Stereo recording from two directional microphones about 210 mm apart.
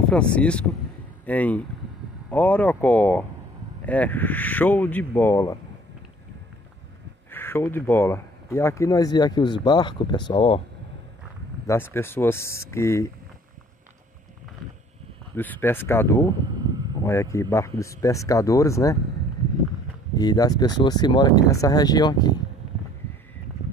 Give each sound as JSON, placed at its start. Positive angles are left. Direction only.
{"t": 0.1, "sound": "speech", "side_deg": 5}
{"t": 7.2, "sound": "speech", "side_deg": 10}
{"t": 11.6, "sound": "speech", "side_deg": 10}
{"t": 15.3, "sound": "speech", "side_deg": 10}
{"t": 20.2, "sound": "speech", "side_deg": 20}